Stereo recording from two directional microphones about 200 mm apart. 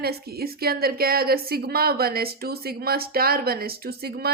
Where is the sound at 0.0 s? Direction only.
50° right (ahead or behind).